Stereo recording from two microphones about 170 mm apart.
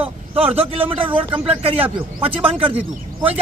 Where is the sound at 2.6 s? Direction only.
35° right (ahead or behind).